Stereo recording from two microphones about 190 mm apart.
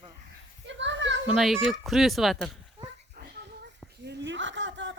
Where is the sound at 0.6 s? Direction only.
70° right (ahead or behind).